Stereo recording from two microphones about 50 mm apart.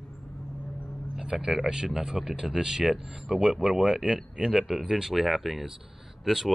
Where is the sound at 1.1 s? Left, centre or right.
Centre.